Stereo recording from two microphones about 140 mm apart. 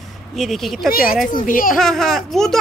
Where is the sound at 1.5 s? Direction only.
80° left.